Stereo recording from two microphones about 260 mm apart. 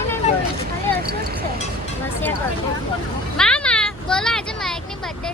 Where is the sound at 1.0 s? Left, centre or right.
Right.